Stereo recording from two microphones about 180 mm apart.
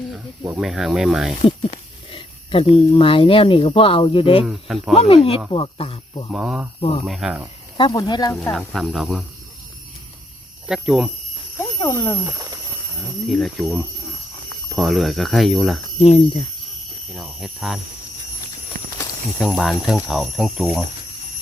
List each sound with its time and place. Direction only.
0.4 s speech: 5° right (ahead or behind)
1.5 s speech: 30° left (ahead or behind)
4.4 s speech: centre (ahead or behind)
4.9 s speech: 30° left (ahead or behind)
6.3 s speech: 5° right (ahead or behind)
7.8 s speech: 25° left (ahead or behind)
8.5 s speech: centre (ahead or behind)
10.7 s speech: centre (ahead or behind)
11.8 s speech: 10° left (ahead or behind)
12.2 s a sound: 15° right (ahead or behind)
13.2 s speech: centre (ahead or behind)
16.0 s speech: 35° left (ahead or behind)
17.1 s speech: centre (ahead or behind)
19.4 s speech: 5° left (ahead or behind)